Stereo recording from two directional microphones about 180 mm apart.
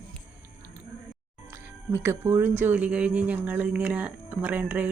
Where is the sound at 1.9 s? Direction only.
15° right (ahead or behind).